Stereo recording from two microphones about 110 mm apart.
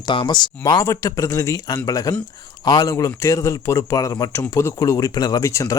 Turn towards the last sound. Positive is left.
turn(degrees=30)  # may be behind; listen again after turning